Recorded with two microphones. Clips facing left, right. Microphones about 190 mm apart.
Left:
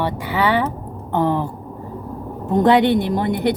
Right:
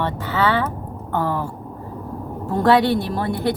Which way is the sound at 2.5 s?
20° left (ahead or behind).